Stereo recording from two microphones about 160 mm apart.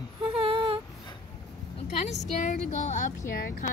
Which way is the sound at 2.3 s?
50° left (ahead or behind).